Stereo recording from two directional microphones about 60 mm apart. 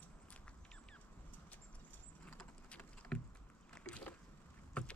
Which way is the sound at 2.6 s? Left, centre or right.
Left.